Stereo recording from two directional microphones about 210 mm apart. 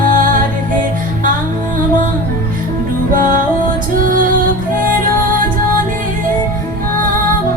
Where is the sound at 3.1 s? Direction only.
40° right (ahead or behind).